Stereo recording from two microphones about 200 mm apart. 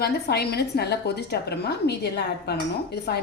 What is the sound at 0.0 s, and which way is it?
A woman's voice, 55° left (ahead or behind).